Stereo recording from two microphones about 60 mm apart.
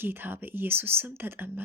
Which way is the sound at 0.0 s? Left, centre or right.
Right.